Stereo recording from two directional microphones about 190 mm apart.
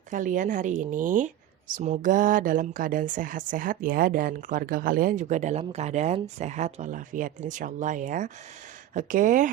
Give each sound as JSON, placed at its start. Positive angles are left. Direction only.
{"t": 0.1, "sound": "a woman's voice", "side_deg": -45}